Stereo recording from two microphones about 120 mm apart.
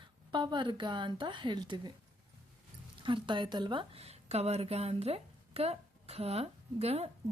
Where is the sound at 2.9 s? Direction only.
45° right (ahead or behind).